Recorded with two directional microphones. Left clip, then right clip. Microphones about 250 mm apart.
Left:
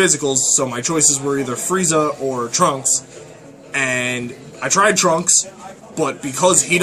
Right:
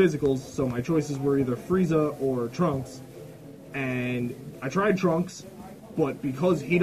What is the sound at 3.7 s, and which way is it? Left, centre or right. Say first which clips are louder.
Speech: left 11 dB; centre.